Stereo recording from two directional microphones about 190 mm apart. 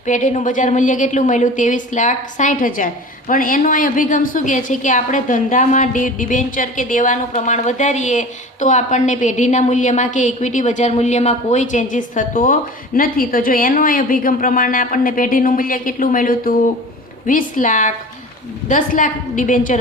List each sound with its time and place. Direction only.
0.0 s a woman's voice: 40° left (ahead or behind)